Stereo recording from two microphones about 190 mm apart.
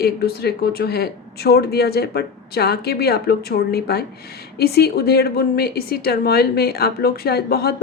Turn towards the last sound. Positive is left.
turn(degrees=55)  # may be behind; listen again after turning